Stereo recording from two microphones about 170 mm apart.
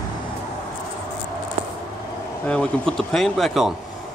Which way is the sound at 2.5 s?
5° left (ahead or behind).